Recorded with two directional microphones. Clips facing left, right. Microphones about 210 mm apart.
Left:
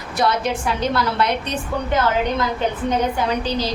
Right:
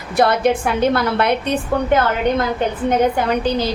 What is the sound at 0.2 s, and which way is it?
A woman's voice, 55° right (ahead or behind).